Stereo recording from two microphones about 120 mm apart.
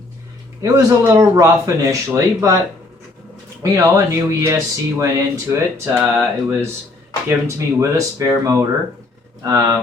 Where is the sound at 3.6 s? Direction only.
25° right (ahead or behind).